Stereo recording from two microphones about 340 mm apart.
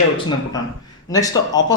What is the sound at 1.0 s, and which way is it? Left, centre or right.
Speech, centre.